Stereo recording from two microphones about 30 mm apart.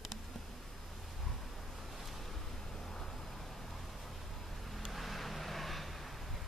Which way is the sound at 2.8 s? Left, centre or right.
Centre.